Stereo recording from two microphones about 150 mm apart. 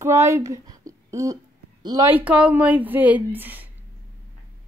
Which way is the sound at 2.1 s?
10° right (ahead or behind).